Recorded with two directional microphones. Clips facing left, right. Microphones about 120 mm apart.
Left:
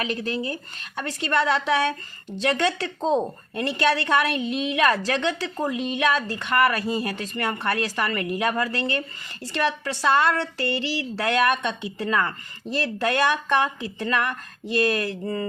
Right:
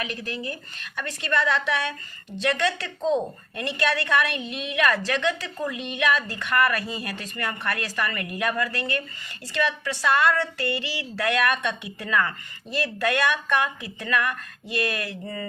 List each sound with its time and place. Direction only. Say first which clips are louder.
0.0 s speech: left 5 dB; 30° left (ahead or behind)